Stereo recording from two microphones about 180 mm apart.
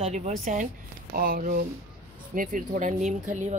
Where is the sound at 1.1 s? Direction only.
55° right (ahead or behind).